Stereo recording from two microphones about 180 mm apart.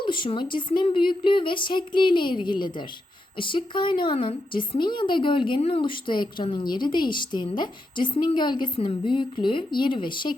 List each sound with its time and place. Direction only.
0.0 s speech: 25° left (ahead or behind)